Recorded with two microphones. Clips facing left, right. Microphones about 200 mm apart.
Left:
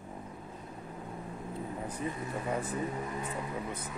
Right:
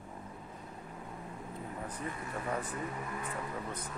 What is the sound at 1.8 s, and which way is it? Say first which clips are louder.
Speech: left 4 dB; 15° left (ahead or behind).